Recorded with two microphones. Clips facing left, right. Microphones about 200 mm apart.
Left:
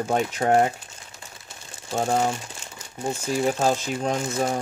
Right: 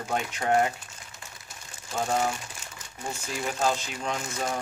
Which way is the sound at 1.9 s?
30° left (ahead or behind).